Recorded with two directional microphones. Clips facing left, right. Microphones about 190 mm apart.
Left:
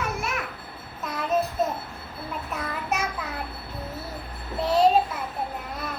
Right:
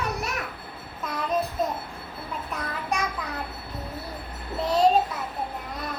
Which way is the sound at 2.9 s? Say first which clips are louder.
Even; 5° left (ahead or behind).